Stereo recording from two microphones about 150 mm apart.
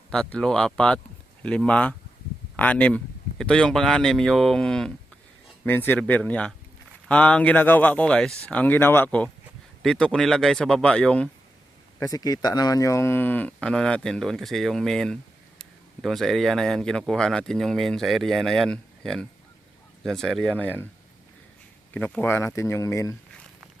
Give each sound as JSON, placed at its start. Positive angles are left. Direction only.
{"t": 0.1, "sound": "speech", "side_deg": 5}
{"t": 11.9, "sound": "speech", "side_deg": 25}
{"t": 21.9, "sound": "speech", "side_deg": 10}